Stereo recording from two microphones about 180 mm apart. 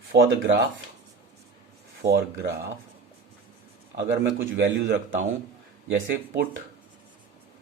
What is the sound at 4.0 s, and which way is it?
A man's voice, 90° right.